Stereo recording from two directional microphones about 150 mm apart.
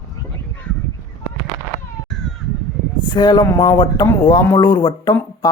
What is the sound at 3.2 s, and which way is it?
Speech, 30° left (ahead or behind).